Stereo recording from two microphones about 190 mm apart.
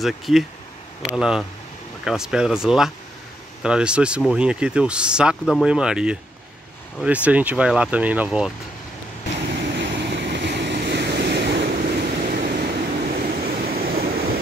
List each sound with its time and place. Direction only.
0.0 s speech: centre (ahead or behind)
9.9 s waves: 65° right (ahead or behind)
12.9 s vehicle: 45° right (ahead or behind)